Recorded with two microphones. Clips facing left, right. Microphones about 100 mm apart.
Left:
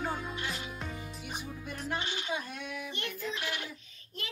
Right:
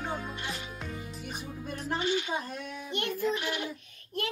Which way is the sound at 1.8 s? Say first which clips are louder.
Right 5 dB; 40° right (ahead or behind).